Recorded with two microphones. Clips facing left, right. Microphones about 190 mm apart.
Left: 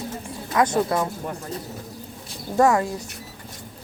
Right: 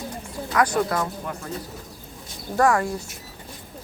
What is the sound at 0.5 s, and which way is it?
Speech, 25° left (ahead or behind).